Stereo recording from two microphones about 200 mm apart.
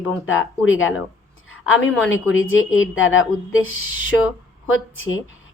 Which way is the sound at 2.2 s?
80° left.